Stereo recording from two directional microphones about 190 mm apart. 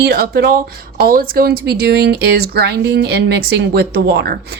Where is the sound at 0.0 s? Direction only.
55° right (ahead or behind).